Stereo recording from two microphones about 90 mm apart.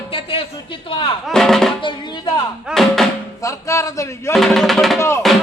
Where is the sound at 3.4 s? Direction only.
35° left (ahead or behind).